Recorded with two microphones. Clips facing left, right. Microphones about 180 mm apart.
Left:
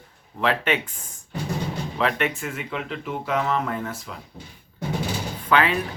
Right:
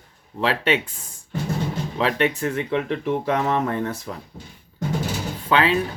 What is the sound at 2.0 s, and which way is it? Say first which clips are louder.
Speech: right 4 dB; 35° right (ahead or behind).